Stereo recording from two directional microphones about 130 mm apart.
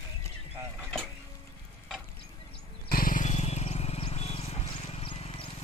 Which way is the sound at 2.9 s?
90° left.